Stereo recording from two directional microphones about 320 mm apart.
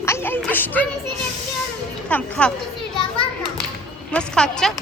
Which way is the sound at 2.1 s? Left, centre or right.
Centre.